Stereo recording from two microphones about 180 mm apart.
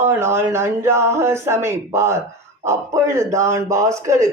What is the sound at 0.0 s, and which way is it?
A man's voice, 15° right (ahead or behind).